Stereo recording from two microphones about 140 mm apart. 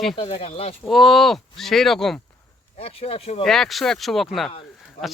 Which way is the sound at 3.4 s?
5° left (ahead or behind).